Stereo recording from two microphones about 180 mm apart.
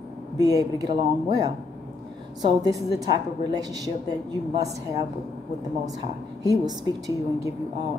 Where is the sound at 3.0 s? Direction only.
20° right (ahead or behind).